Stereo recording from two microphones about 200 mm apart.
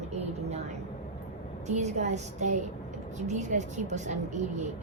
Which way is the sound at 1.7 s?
35° right (ahead or behind).